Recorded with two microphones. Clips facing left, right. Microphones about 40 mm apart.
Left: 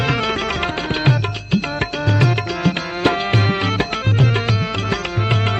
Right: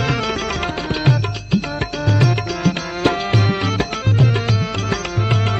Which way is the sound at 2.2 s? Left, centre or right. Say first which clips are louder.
Even; left.